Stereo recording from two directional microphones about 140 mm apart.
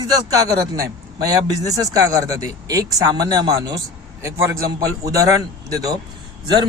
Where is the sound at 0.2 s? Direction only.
25° right (ahead or behind).